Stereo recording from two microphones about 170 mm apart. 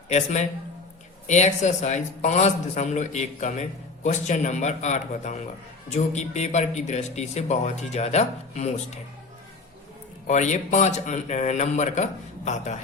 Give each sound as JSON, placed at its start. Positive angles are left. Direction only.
{"t": 0.1, "sound": "a man's voice", "side_deg": 45}
{"t": 10.2, "sound": "a man's voice", "side_deg": 45}